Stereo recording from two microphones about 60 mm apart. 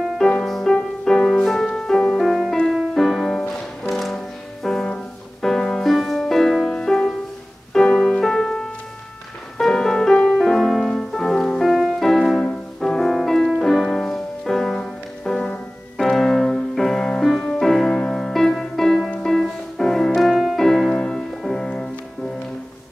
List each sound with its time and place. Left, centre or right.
0.2 s music: centre